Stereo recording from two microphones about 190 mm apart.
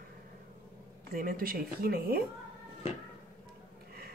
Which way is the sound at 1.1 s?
50° right (ahead or behind).